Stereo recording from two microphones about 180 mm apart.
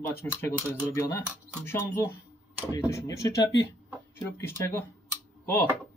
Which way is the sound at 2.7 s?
15° left (ahead or behind).